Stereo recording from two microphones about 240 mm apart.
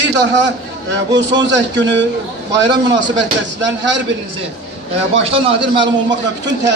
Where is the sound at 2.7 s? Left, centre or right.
Centre.